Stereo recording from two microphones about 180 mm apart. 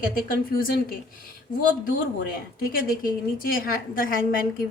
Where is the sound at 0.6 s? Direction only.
55° left (ahead or behind).